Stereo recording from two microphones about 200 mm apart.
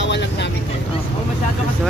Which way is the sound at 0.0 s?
60° left (ahead or behind).